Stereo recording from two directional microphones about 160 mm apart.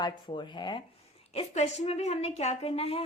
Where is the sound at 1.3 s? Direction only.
45° left (ahead or behind).